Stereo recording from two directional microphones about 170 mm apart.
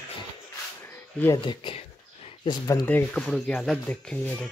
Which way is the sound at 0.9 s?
15° left (ahead or behind).